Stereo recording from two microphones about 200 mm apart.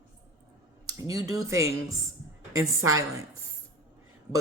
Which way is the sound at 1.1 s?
15° right (ahead or behind).